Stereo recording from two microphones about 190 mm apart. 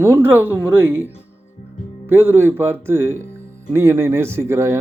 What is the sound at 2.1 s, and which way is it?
Speech, 10° right (ahead or behind).